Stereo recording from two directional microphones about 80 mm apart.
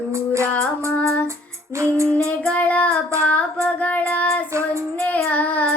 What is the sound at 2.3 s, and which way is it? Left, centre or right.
Child singing, centre.